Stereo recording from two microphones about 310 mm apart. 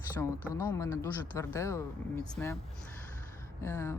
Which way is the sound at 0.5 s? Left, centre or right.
Centre.